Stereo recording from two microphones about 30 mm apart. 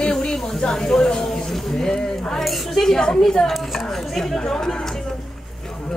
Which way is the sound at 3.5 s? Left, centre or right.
Centre.